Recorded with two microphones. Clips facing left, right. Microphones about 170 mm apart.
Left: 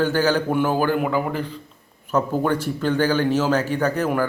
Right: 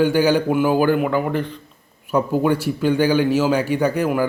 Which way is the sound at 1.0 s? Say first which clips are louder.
Right 3 dB; centre (ahead or behind).